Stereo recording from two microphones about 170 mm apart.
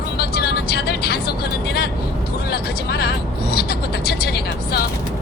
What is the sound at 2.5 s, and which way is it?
Vehicle, 70° left (ahead or behind).